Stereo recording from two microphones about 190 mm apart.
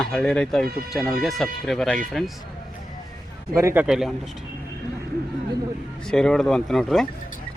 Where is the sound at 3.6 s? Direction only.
15° right (ahead or behind).